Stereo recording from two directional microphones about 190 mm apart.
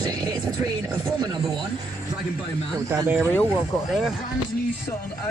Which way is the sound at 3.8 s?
Centre (ahead or behind).